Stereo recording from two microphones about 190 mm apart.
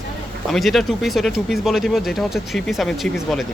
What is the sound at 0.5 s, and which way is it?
Speech, centre (ahead or behind).